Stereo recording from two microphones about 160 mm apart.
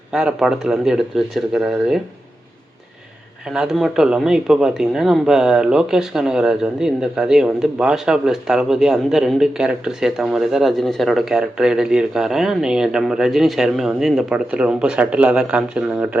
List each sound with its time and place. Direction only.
0.1 s speech: 5° right (ahead or behind)
3.5 s speech: 5° right (ahead or behind)